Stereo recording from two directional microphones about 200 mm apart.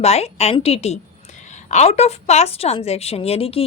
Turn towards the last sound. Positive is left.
turn(degrees=30)  # may be behind; listen again after turning